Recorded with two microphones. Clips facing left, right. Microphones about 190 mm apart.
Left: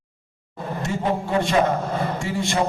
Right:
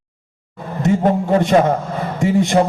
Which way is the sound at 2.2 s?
20° right (ahead or behind).